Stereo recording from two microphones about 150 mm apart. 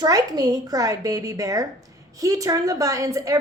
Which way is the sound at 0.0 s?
25° right (ahead or behind).